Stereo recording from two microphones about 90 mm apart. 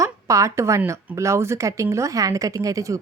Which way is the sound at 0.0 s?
35° right (ahead or behind).